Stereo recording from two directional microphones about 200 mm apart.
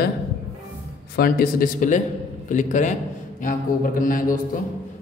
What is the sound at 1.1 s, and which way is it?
A man's voice, 50° left (ahead or behind).